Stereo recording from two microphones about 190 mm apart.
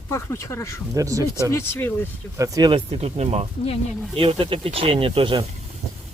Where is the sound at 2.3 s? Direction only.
15° right (ahead or behind).